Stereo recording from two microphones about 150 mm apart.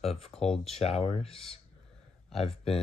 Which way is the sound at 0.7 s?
40° left (ahead or behind).